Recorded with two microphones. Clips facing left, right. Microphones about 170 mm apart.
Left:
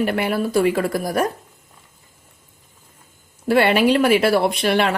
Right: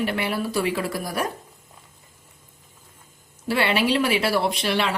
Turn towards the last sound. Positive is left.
turn(degrees=55)  # may be behind; listen again after turning